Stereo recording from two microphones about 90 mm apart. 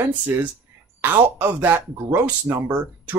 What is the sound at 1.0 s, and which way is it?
Speech, 20° right (ahead or behind).